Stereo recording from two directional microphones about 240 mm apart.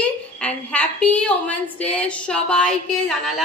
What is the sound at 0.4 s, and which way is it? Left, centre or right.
A woman's voice, centre.